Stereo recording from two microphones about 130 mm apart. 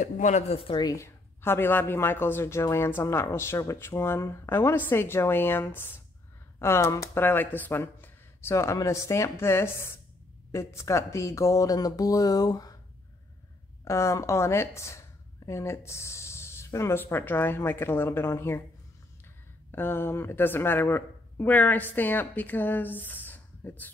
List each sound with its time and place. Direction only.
0.0 s speech: 65° left (ahead or behind); by 0.8 s 45° left (ahead or behind)
0.8 s speech: 20° left (ahead or behind)
13.8 s speech: 20° left (ahead or behind)
19.7 s a woman's voice: 15° left (ahead or behind)